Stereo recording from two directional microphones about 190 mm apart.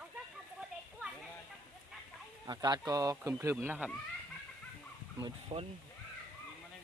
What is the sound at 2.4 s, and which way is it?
Speech, 20° right (ahead or behind).